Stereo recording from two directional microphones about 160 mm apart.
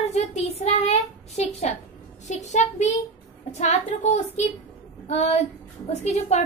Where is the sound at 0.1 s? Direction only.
45° left (ahead or behind).